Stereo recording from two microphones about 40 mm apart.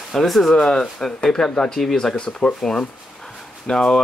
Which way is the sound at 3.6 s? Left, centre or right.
Centre.